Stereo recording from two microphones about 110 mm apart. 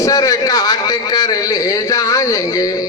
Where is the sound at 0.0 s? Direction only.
30° left (ahead or behind).